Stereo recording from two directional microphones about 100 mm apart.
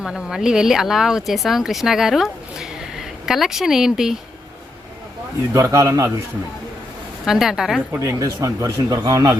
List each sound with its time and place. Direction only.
0.0 s speech: 5° right (ahead or behind)
5.5 s speech: 35° right (ahead or behind)
7.3 s a woman's voice: 5° right (ahead or behind)
7.9 s speech: 35° right (ahead or behind)